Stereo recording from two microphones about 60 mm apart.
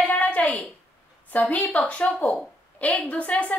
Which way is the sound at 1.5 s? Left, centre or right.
Left.